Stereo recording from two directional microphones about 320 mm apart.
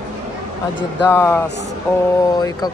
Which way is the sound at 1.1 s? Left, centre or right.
Centre.